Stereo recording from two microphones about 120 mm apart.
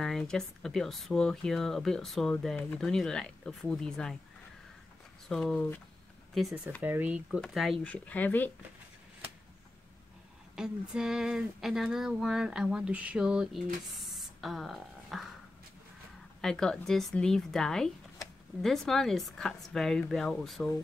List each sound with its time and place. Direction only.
0.0 s speech: 5° left (ahead or behind)
2.3 s speech: 15° left (ahead or behind)
5.3 s speech: 5° left (ahead or behind)
6.8 s speech: 15° right (ahead or behind)
7.4 s speech: centre (ahead or behind)
7.8 s speech: 10° left (ahead or behind)
10.5 s speech: 5° right (ahead or behind)
14.1 s a sound: centre (ahead or behind)
16.3 s speech: 5° left (ahead or behind)